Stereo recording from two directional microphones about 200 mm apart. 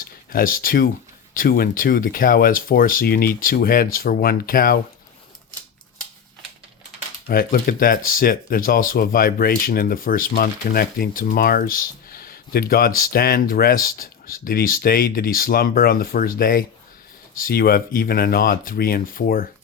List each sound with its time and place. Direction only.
0.0 s speech: 45° left (ahead or behind)
7.3 s speech: 50° left (ahead or behind)